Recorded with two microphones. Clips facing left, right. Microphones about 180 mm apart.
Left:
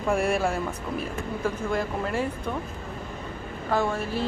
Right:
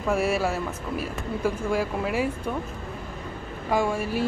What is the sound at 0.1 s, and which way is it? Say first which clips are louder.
Speech: even; 5° right (ahead or behind).